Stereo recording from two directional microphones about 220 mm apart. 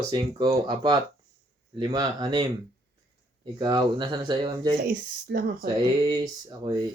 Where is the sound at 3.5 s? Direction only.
20° right (ahead or behind).